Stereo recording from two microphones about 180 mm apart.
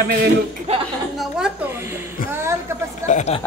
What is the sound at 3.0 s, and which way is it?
Speech, 40° left (ahead or behind).